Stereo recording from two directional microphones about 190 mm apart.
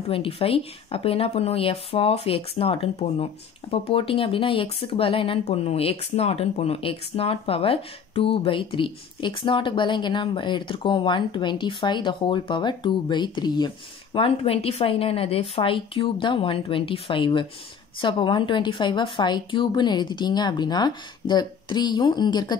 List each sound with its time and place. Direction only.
0.1 s speech: 30° left (ahead or behind)